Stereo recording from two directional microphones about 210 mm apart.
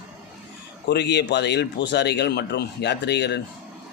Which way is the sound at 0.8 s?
55° left (ahead or behind).